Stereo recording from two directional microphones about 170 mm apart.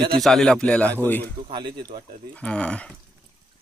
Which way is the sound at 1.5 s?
25° right (ahead or behind).